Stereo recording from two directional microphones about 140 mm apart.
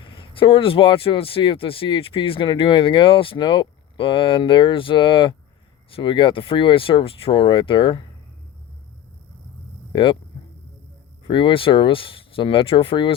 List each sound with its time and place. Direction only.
0.0 s speech: 35° left (ahead or behind)
9.9 s speech: 35° left (ahead or behind)
11.3 s speech: 35° left (ahead or behind)